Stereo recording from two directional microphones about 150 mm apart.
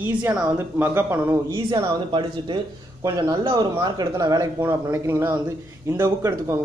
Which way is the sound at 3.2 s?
25° right (ahead or behind).